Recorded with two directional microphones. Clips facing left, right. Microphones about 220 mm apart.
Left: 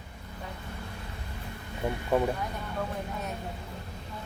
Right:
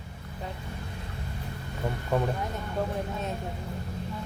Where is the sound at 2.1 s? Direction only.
5° left (ahead or behind).